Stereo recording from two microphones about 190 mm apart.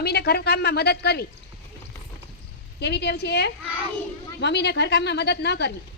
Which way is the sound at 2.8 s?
60° left (ahead or behind).